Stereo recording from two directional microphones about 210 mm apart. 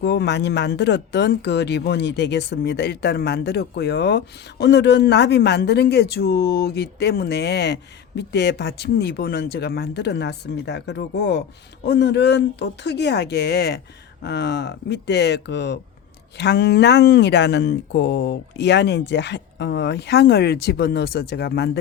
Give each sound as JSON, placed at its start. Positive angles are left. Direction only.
{"t": 0.0, "sound": "speech", "side_deg": 55}